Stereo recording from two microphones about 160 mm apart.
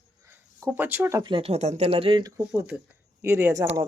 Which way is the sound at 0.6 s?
10° right (ahead or behind).